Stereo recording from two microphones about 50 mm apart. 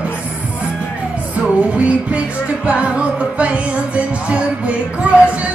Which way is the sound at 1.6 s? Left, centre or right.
Right.